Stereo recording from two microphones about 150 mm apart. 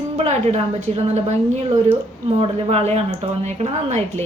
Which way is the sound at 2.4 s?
40° right (ahead or behind).